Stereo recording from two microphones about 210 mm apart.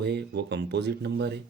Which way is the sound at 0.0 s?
50° right (ahead or behind).